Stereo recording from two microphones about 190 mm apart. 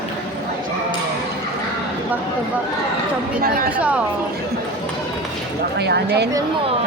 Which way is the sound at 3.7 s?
5° right (ahead or behind).